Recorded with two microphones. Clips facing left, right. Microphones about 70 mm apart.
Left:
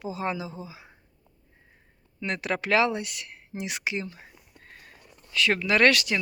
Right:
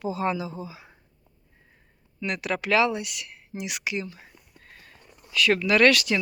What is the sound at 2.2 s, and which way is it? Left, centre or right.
Speech, left.